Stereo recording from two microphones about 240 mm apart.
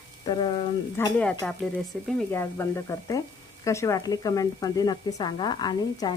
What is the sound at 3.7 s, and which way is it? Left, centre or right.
Speech, centre.